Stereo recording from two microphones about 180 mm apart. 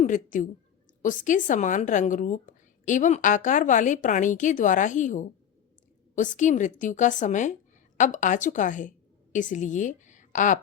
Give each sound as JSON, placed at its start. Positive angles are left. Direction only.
{"t": 0.0, "sound": "a woman's voice", "side_deg": 45}